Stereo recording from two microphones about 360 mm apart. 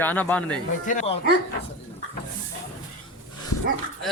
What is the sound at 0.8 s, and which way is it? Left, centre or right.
Speech, centre.